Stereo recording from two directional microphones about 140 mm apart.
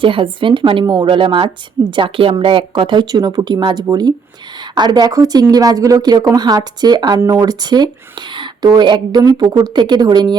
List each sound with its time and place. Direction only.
0.0 s a woman's voice: 40° right (ahead or behind)